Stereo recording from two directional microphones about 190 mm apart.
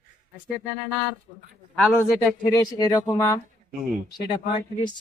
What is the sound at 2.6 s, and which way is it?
Speech, 20° left (ahead or behind).